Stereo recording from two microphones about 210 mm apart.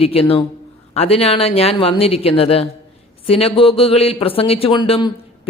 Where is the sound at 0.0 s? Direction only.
25° left (ahead or behind).